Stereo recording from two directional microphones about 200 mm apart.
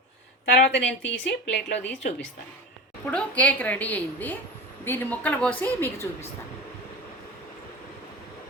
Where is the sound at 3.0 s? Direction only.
5° left (ahead or behind).